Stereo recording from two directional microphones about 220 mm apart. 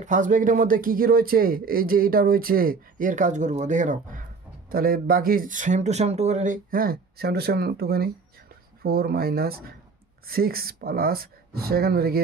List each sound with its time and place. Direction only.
0.0 s speech: 35° right (ahead or behind)